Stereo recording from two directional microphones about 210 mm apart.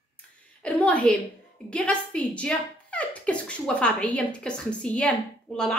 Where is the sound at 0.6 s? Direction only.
5° left (ahead or behind).